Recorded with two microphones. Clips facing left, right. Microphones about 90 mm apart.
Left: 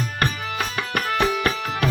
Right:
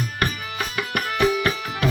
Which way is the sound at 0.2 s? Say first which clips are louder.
Left 2 dB; 35° left (ahead or behind).